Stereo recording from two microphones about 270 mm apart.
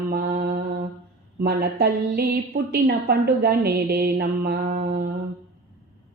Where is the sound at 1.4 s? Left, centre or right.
Right.